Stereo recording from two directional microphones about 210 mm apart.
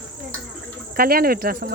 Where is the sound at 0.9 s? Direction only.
45° right (ahead or behind).